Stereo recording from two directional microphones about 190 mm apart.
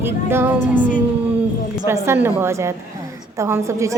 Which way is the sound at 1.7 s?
15° right (ahead or behind).